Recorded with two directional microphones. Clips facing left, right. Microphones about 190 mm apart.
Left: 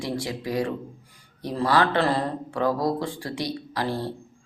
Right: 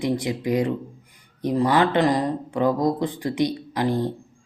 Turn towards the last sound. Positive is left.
turn(degrees=-20)  # may be behind; listen again after turning